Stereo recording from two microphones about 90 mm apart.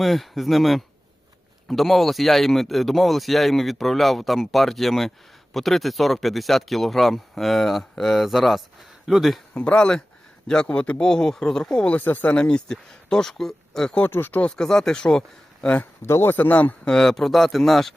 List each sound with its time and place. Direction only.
0.0 s speech: centre (ahead or behind)
9.6 s speech: 10° left (ahead or behind)
14.0 s speech: 20° left (ahead or behind)
16.0 s speech: 30° left (ahead or behind); by 17.9 s centre (ahead or behind)